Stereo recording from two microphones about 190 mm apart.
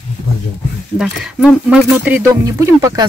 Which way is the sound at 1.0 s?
5° right (ahead or behind).